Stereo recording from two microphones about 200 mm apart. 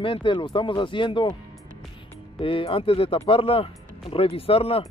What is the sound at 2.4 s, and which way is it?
Speech, 25° left (ahead or behind).